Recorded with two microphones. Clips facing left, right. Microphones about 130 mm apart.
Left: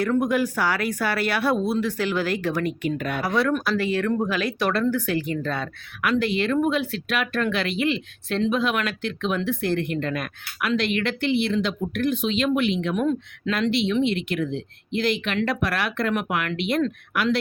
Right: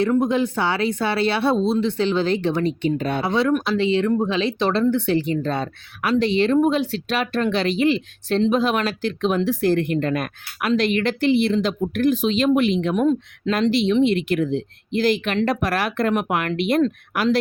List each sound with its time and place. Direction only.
0.2 s speech: 25° right (ahead or behind)
13.5 s speech: 40° right (ahead or behind)
16.8 s speech: 30° right (ahead or behind)